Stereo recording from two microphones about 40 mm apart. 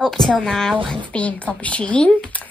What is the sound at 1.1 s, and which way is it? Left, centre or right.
Speech, left.